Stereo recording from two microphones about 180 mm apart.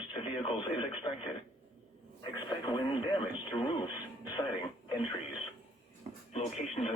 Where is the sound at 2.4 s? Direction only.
25° left (ahead or behind).